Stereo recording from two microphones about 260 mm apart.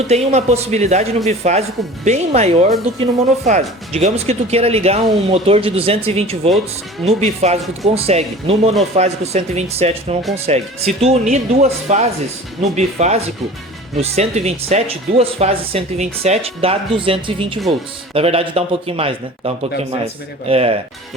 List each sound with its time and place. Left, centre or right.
0.1 s speech: right